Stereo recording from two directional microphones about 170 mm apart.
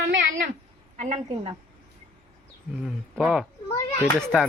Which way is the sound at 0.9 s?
40° right (ahead or behind).